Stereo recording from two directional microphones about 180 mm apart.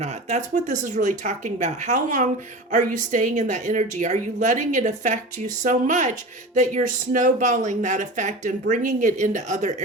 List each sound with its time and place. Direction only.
0.0 s speech: 40° right (ahead or behind)